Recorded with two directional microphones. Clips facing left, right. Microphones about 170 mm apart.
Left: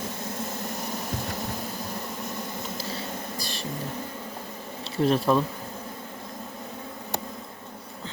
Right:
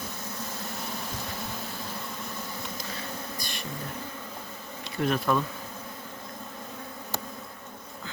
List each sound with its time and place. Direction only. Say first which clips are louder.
3.3 s music: left 3 dB; 35° left (ahead or behind)
4.8 s bee: left 5 dB; 30° left (ahead or behind)